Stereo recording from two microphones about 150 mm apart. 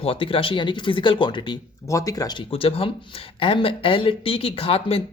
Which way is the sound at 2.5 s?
40° left (ahead or behind).